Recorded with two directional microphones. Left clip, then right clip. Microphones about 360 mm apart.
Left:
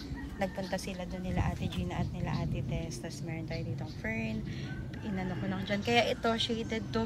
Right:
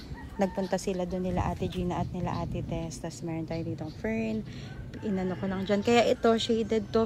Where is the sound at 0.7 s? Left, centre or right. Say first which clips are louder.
Right 7 dB; centre.